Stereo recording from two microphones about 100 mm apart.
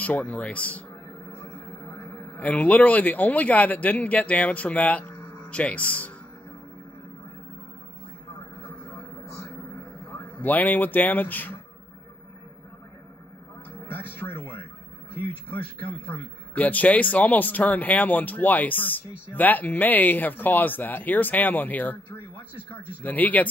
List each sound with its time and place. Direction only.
0.0 s speech: 15° left (ahead or behind)
1.5 s a sound: 30° left (ahead or behind)
2.3 s speech: 15° left (ahead or behind)
10.3 s speech: 15° left (ahead or behind)
13.8 s music: 20° left (ahead or behind)
16.5 s speech: 15° left (ahead or behind)